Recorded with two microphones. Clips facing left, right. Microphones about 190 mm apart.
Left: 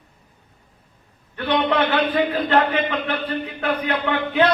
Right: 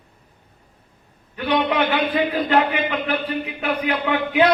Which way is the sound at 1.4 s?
10° right (ahead or behind).